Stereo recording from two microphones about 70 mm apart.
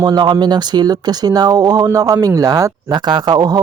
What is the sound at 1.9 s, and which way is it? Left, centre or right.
Speech, right.